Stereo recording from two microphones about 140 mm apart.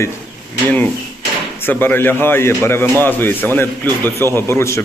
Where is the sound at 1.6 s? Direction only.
15° left (ahead or behind).